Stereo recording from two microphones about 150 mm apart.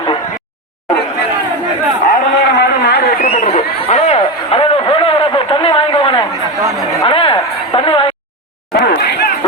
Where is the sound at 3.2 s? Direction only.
50° left (ahead or behind).